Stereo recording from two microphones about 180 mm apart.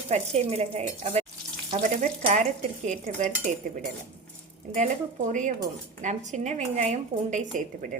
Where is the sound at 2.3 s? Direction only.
40° right (ahead or behind).